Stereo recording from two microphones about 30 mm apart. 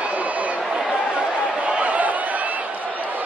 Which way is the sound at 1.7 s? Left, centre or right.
Right.